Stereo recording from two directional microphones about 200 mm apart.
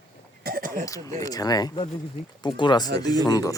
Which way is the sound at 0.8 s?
15° left (ahead or behind).